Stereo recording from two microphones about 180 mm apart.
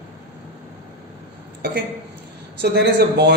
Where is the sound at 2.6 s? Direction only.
65° right (ahead or behind).